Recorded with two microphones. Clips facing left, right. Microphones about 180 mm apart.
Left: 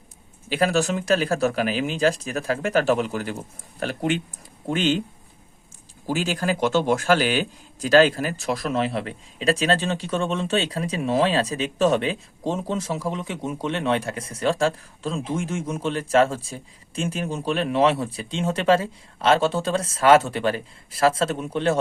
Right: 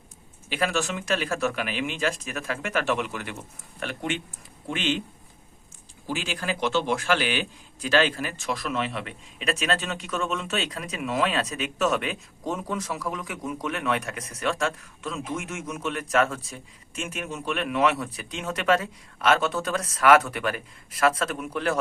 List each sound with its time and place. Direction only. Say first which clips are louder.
0.5 s speech: left 6 dB; 40° left (ahead or behind)
6.1 s a man's voice: left 6 dB; 40° left (ahead or behind); by 21.8 s 25° left (ahead or behind)